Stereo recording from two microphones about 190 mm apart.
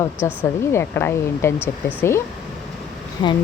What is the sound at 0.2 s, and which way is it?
Speech, 15° left (ahead or behind).